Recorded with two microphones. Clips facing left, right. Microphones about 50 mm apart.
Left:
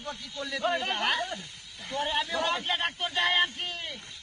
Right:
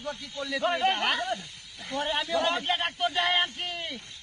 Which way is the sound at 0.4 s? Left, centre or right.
Centre.